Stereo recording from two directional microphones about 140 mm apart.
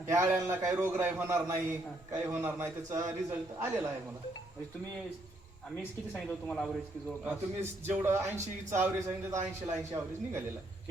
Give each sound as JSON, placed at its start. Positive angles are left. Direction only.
{"t": 0.1, "sound": "a man's voice", "side_deg": -20}
{"t": 5.7, "sound": "speech", "side_deg": 5}
{"t": 7.3, "sound": "a man's voice", "side_deg": -15}